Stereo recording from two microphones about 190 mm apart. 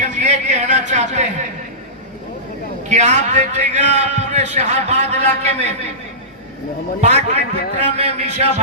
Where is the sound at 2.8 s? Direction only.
40° right (ahead or behind).